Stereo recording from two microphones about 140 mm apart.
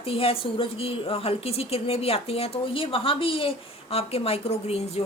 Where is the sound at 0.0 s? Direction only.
45° left (ahead or behind).